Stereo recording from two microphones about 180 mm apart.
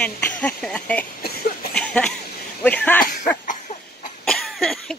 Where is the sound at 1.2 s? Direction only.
60° left (ahead or behind).